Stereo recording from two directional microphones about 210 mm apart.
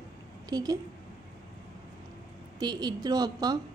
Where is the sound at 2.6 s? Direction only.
20° right (ahead or behind).